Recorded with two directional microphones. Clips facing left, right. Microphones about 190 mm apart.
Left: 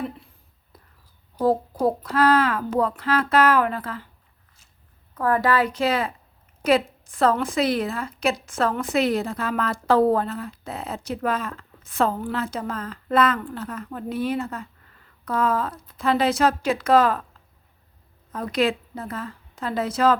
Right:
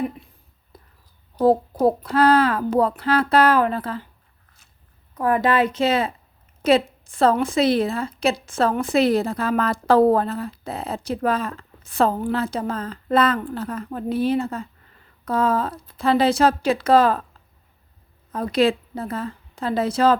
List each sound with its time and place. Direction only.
1.8 s a woman's voice: 30° right (ahead or behind)
5.1 s a woman's voice: 15° right (ahead or behind)
18.3 s a woman's voice: 30° right (ahead or behind)